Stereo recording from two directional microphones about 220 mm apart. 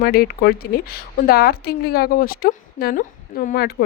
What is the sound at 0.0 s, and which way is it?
Speech, 45° left (ahead or behind).